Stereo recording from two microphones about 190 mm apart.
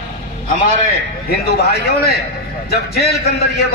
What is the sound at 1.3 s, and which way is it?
A man's voice, 55° left (ahead or behind).